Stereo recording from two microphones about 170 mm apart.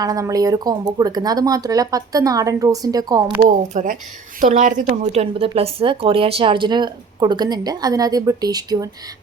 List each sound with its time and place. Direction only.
0.0 s a woman's voice: 20° right (ahead or behind)
3.7 s a woman's voice: 45° right (ahead or behind); by 8.9 s 20° right (ahead or behind)